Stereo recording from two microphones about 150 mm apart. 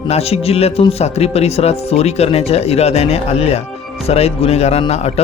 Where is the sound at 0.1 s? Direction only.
40° left (ahead or behind).